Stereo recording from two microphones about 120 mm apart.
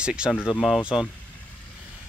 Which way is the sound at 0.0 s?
10° right (ahead or behind).